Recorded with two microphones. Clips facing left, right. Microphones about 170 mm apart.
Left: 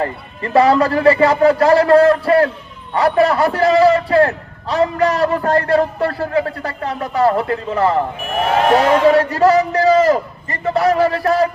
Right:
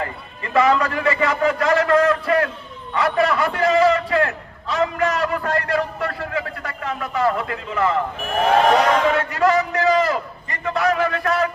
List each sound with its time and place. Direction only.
0.0 s a man's voice: 35° left (ahead or behind)
8.4 s speech: 5° left (ahead or behind)
9.0 s a man's voice: 35° left (ahead or behind)